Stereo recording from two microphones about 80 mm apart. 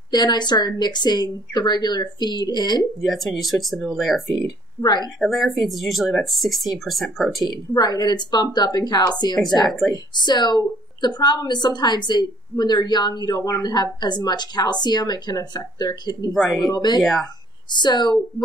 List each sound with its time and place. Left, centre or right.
0.1 s a woman's voice: left
3.0 s speech: centre
4.8 s a woman's voice: left
5.2 s speech: centre
7.4 s a woman's voice: left
9.7 s speech: centre
10.2 s a woman's voice: left
16.3 s speech: centre
16.6 s a woman's voice: left
17.0 s speech: centre
17.8 s speech: left